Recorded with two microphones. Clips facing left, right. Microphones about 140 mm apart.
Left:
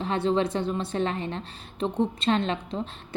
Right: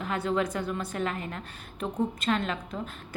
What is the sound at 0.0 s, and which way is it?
A woman's voice, 25° left (ahead or behind).